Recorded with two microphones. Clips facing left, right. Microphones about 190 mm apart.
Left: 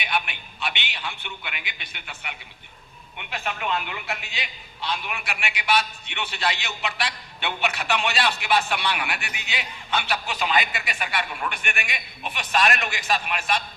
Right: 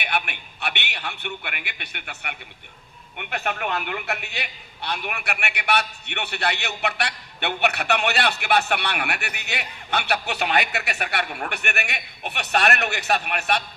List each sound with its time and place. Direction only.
0.0 s a man's voice: 65° right (ahead or behind)